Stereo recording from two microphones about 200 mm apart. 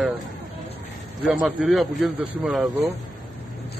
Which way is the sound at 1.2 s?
Centre (ahead or behind).